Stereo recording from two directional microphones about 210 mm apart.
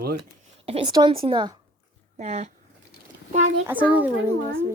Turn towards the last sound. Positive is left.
turn(degrees=-10)  # may be behind; listen again after turning